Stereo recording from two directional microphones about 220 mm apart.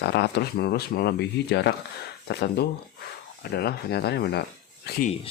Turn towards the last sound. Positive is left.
turn(degrees=45)  # may be behind; listen again after turning